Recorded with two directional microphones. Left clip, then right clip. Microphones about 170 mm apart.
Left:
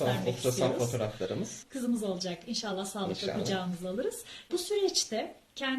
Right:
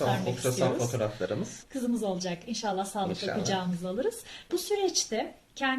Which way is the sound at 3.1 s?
Centre (ahead or behind).